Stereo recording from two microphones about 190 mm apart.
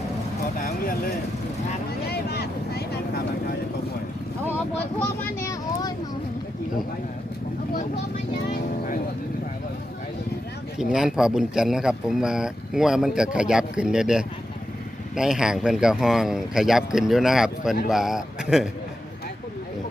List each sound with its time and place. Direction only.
2.0 s vehicle: 55° left (ahead or behind)
4.9 s speech: 15° left (ahead or behind)
10.8 s speech: 5° right (ahead or behind)